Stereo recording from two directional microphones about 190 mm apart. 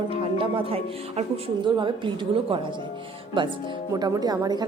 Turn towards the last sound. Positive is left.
turn(degrees=-20)  # may be behind; listen again after turning